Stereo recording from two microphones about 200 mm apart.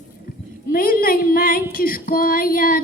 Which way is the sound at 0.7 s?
45° left (ahead or behind).